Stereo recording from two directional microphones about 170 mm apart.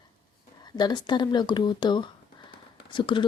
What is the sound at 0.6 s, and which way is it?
Speech, 25° left (ahead or behind).